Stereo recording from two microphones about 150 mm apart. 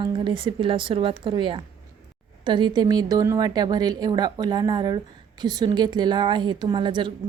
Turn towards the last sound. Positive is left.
turn(degrees=-30)  # may be behind; listen again after turning